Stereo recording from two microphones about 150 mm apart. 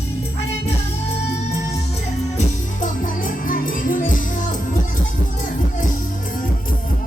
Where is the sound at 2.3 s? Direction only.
60° left (ahead or behind).